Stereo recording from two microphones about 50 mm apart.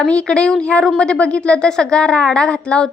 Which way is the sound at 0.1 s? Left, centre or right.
Centre.